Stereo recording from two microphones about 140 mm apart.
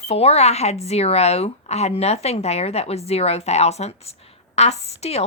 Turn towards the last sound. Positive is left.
turn(degrees=50)  # may be behind; listen again after turning